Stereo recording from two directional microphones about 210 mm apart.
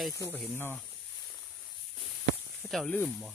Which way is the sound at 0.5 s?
10° left (ahead or behind).